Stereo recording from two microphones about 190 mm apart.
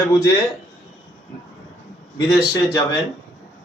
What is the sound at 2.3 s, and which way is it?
Speech, 15° left (ahead or behind).